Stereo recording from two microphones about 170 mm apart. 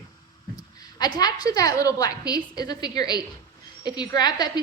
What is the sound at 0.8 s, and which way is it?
A woman's voice, 25° left (ahead or behind).